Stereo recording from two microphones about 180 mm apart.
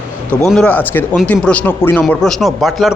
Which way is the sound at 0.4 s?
5° left (ahead or behind).